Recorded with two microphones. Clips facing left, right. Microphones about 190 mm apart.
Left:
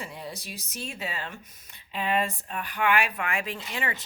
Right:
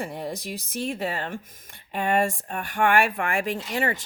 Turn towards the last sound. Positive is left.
turn(degrees=-45)  # may be behind; listen again after turning